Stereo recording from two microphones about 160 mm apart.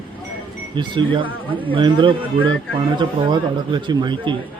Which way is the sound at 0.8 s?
30° right (ahead or behind).